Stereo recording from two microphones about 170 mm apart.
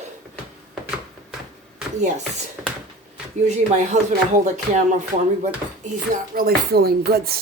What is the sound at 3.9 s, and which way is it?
Speech, 45° right (ahead or behind).